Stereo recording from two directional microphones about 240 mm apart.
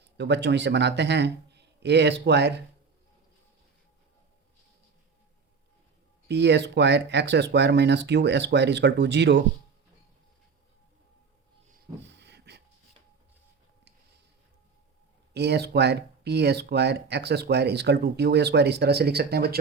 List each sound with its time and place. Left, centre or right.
0.2 s speech: right
6.2 s speech: right
11.7 s a sound: right
15.3 s speech: right